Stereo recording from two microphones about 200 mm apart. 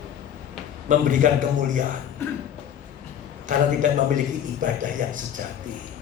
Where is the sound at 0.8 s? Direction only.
40° right (ahead or behind).